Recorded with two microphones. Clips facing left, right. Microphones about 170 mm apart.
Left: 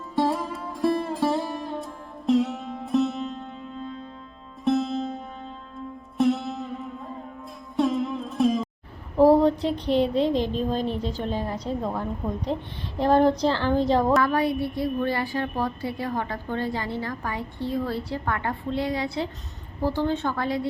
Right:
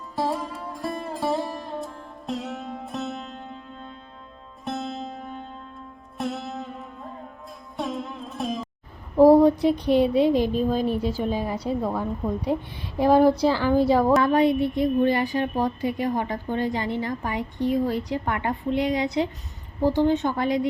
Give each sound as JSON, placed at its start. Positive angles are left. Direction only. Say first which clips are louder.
{"t": 0.2, "sound": "music", "louder": "left 3 dB", "side_deg": 0}
{"t": 4.6, "sound": "music", "louder": "left 7 dB", "side_deg": 0}
{"t": 6.1, "sound": "music", "louder": "left 7 dB", "side_deg": 0}
{"t": 9.1, "sound": "a woman's voice", "louder": "right 3 dB", "side_deg": -10}
{"t": 14.2, "sound": "a woman's voice", "louder": "right 4 dB", "side_deg": -20}